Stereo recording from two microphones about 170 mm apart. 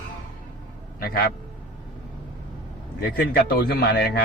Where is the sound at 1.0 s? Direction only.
65° left (ahead or behind).